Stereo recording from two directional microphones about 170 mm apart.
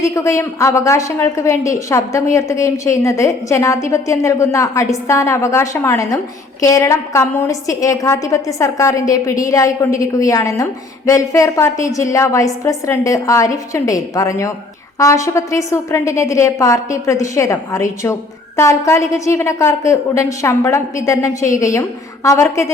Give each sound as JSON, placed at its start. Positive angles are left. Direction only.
{"t": 0.0, "sound": "a woman's voice", "side_deg": 15}